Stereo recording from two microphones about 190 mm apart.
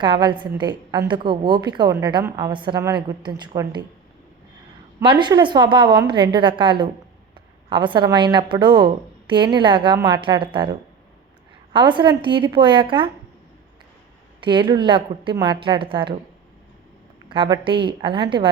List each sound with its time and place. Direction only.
0.0 s a woman's voice: 25° right (ahead or behind)
5.2 s a woman's voice: 25° right (ahead or behind)
14.4 s a woman's voice: 25° right (ahead or behind)
17.2 s a woman's voice: 25° right (ahead or behind)